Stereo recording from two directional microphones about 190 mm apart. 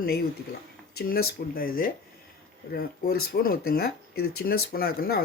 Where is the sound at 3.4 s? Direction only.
50° left (ahead or behind).